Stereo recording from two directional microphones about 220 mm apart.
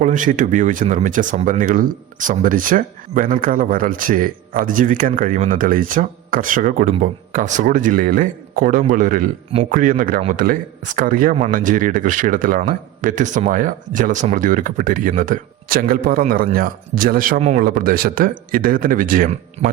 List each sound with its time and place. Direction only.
0.0 s speech: 35° right (ahead or behind)